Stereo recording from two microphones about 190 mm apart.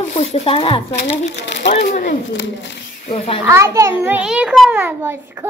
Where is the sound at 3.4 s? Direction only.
15° right (ahead or behind).